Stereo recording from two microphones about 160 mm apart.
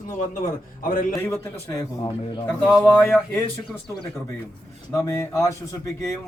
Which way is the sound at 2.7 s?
5° left (ahead or behind).